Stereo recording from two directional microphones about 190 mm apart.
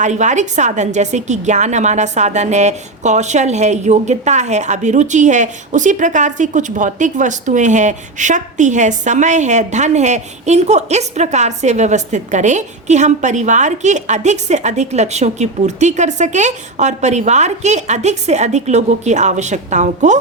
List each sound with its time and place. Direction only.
0.0 s a woman's voice: 40° right (ahead or behind)